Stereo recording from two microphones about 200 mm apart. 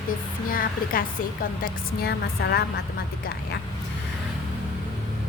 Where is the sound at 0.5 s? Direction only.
45° left (ahead or behind).